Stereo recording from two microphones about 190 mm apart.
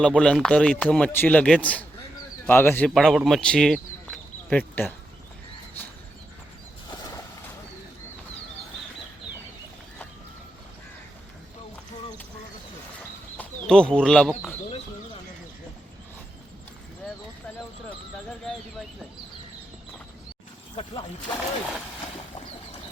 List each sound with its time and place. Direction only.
0.1 s a man's voice: centre (ahead or behind)
13.3 s speech: 5° left (ahead or behind)
20.7 s snake: 25° left (ahead or behind)